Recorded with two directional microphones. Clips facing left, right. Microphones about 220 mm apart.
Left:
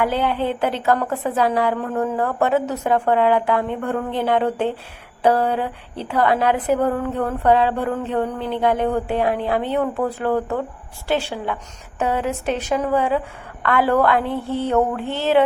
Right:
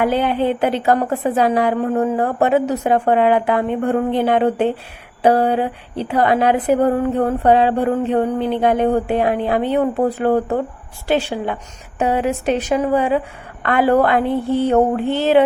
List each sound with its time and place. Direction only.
0.0 s a woman's voice: 15° right (ahead or behind)
6.7 s a sound: 35° right (ahead or behind)
7.3 s a woman's voice: 15° right (ahead or behind)
11.1 s a woman's voice: 20° right (ahead or behind)